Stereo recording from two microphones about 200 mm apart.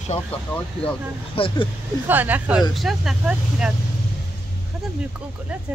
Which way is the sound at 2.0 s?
10° right (ahead or behind).